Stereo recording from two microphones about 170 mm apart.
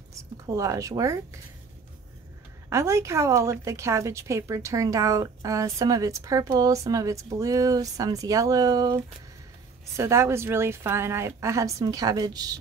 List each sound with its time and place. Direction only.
0.5 s a woman's voice: 20° right (ahead or behind)
2.7 s a woman's voice: 15° right (ahead or behind)